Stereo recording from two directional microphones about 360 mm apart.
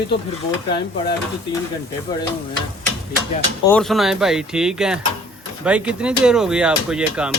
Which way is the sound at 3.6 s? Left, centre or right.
Centre.